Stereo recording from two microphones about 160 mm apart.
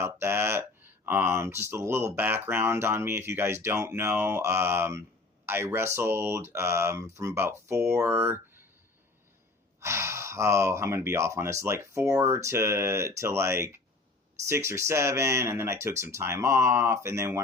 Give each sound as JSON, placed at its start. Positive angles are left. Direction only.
{"t": 0.0, "sound": "speech", "side_deg": -15}
{"t": 9.8, "sound": "speech", "side_deg": -15}